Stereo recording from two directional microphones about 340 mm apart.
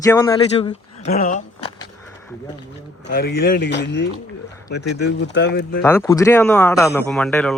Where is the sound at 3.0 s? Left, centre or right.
Left.